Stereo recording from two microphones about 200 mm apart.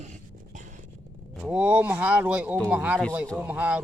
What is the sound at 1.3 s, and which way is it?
Speech, 5° right (ahead or behind).